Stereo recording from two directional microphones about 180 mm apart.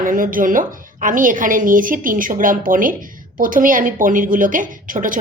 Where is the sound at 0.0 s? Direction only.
50° right (ahead or behind).